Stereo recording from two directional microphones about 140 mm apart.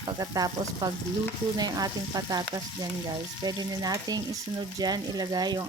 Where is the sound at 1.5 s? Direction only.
30° right (ahead or behind).